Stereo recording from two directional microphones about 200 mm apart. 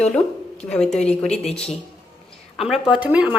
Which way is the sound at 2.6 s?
5° right (ahead or behind).